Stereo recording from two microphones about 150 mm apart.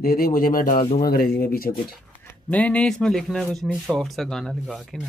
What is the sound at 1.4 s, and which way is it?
Speech, 75° left (ahead or behind).